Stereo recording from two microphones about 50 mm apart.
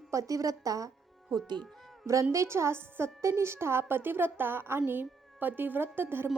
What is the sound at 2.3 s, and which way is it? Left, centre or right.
A woman's voice, right.